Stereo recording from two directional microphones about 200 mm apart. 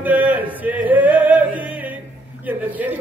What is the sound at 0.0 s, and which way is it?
Chant, 10° right (ahead or behind).